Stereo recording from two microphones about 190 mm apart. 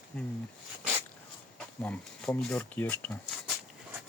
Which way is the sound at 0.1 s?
5° left (ahead or behind).